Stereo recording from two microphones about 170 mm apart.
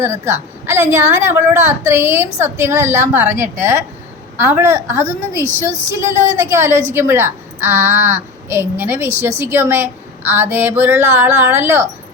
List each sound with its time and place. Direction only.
0.0 s a woman's voice: 15° right (ahead or behind)